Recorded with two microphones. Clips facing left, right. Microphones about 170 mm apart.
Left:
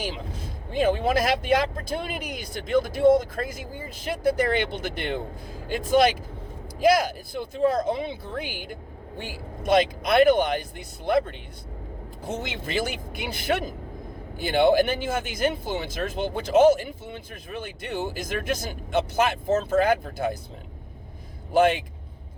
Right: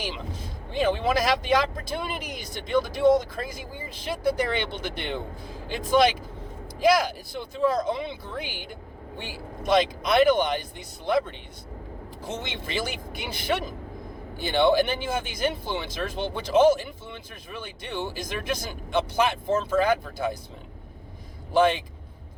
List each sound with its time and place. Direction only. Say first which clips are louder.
0.7 s speech: left 2 dB; 45° left (ahead or behind)